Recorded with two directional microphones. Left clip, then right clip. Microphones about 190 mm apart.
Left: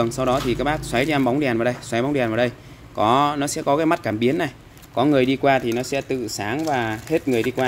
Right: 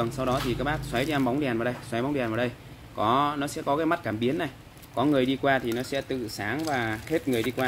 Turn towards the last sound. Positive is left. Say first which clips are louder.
# left 6 dB
turn(degrees=35)  # may be behind; listen again after turning